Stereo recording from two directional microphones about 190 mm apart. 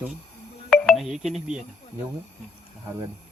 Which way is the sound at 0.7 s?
Centre (ahead or behind).